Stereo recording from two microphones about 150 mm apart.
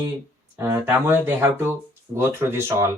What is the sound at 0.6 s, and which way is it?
Speech, 15° right (ahead or behind).